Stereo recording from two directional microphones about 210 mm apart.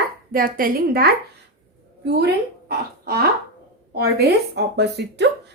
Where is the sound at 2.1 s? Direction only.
50° right (ahead or behind).